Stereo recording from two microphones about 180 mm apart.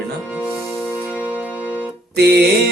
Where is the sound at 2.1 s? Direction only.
65° right (ahead or behind).